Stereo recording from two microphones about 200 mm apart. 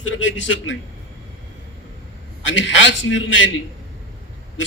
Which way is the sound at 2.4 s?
70° left (ahead or behind).